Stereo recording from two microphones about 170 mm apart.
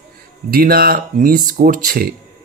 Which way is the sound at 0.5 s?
60° right (ahead or behind).